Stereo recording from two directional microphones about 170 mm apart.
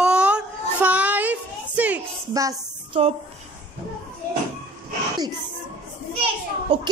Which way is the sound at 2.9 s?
35° right (ahead or behind).